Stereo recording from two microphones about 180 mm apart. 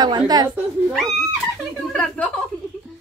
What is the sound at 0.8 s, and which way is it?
Speech, centre (ahead or behind).